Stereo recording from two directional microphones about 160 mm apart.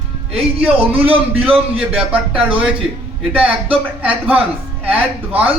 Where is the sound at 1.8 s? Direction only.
5° right (ahead or behind).